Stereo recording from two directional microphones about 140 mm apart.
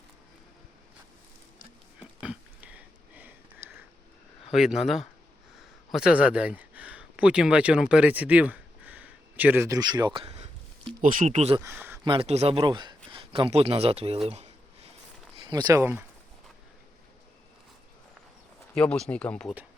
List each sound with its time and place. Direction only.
2.0 s a sound: 10° right (ahead or behind)
4.5 s speech: centre (ahead or behind); by 10.9 s 45° right (ahead or behind)
11.0 s speech: 60° right (ahead or behind)
11.6 s speech: 15° right (ahead or behind)
12.0 s speech: 40° right (ahead or behind)
15.4 s speech: 30° right (ahead or behind)
15.8 s speech: 15° right (ahead or behind)
18.7 s speech: 5° left (ahead or behind)